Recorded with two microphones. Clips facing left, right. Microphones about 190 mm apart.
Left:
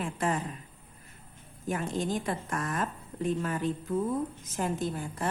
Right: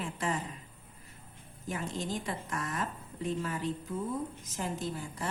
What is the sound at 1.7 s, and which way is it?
A woman's voice, 55° left (ahead or behind).